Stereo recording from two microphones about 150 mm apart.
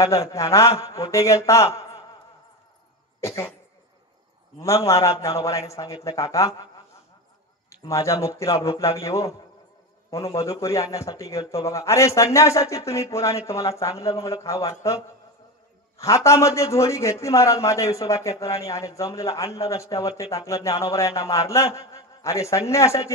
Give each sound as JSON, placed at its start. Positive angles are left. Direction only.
{"t": 0.0, "sound": "a man's voice", "side_deg": 20}
{"t": 3.2, "sound": "speech", "side_deg": 20}
{"t": 4.6, "sound": "a man's voice", "side_deg": 20}
{"t": 7.7, "sound": "a man's voice", "side_deg": 20}